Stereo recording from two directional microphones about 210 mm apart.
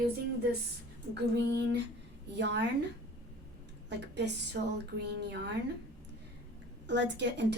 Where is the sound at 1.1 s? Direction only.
55° right (ahead or behind).